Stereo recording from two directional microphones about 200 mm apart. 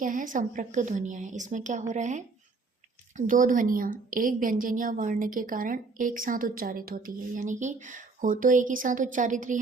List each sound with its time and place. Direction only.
0.0 s a woman's voice: 40° right (ahead or behind)